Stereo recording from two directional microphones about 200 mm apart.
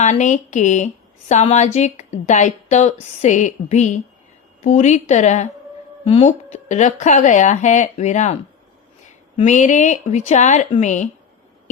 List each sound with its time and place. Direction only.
0.0 s a woman's voice: 40° left (ahead or behind)